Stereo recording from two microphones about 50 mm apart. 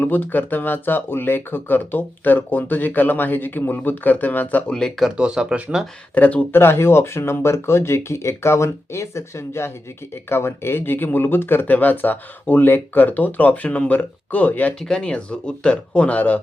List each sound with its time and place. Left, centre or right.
0.0 s speech: left
5.1 s speech: centre
6.1 s speech: left
6.6 s speech: left
11.6 s speech: left
14.8 s speech: centre; by 16.4 s left